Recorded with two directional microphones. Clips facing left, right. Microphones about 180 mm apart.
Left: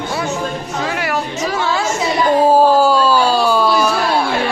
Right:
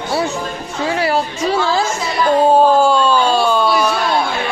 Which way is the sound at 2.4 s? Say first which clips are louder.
Even; 5° left (ahead or behind).